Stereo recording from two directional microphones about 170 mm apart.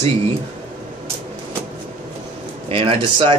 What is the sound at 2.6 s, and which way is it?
Speech, 35° right (ahead or behind).